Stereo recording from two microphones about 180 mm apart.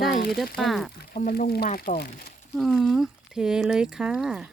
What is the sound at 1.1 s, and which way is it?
Speech, 55° left (ahead or behind).